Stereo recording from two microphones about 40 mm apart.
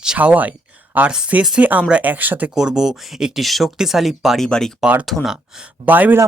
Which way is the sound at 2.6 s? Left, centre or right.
Centre.